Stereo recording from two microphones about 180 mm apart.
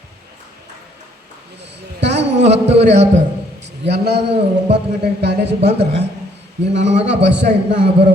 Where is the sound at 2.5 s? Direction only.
35° right (ahead or behind).